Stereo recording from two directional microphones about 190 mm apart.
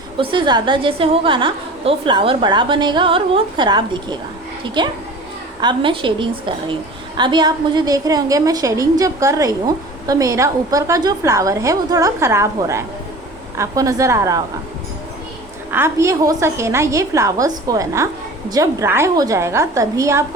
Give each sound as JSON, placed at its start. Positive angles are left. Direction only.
{"t": 0.2, "sound": "a woman's voice", "side_deg": -25}
{"t": 15.7, "sound": "a woman's voice", "side_deg": -15}